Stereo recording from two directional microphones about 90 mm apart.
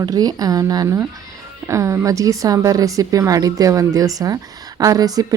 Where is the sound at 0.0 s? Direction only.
45° right (ahead or behind).